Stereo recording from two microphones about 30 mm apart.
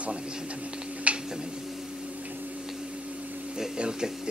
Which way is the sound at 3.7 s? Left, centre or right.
Right.